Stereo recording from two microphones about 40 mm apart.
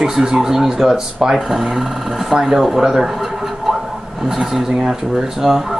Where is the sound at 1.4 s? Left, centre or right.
Centre.